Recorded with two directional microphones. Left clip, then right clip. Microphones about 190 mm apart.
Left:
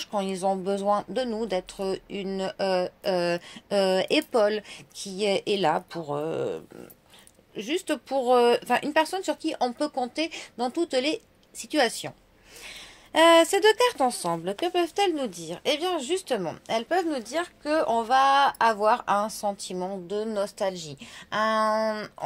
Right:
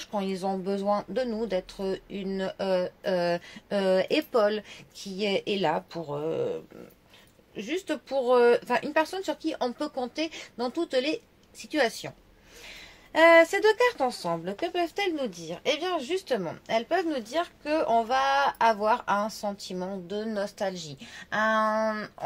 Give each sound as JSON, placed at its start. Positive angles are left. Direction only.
{"t": 0.0, "sound": "a woman's voice", "side_deg": 35}